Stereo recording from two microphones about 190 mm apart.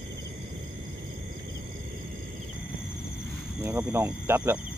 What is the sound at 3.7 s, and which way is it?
Speech, 15° right (ahead or behind).